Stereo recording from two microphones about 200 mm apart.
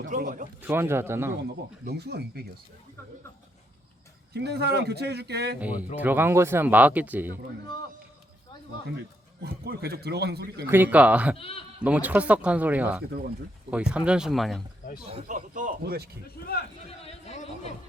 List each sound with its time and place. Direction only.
0.0 s a man's voice: 40° right (ahead or behind)
0.6 s speech: 10° right (ahead or behind)
1.4 s speech: 55° right (ahead or behind)
4.4 s speech: 55° right (ahead or behind)
5.5 s speech: 5° right (ahead or behind)
9.0 s a man's voice: 55° right (ahead or behind)
10.7 s speech: 10° right (ahead or behind)
11.3 s speech: 30° left (ahead or behind)
11.8 s speech: 5° right (ahead or behind)
15.3 s speech: 40° right (ahead or behind)
16.2 s speech: 50° left (ahead or behind)
17.0 s chatter: 30° left (ahead or behind)